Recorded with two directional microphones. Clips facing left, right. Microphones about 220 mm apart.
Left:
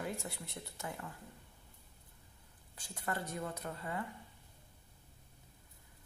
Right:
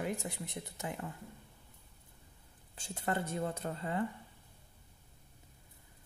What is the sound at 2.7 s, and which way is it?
Speech, 25° right (ahead or behind).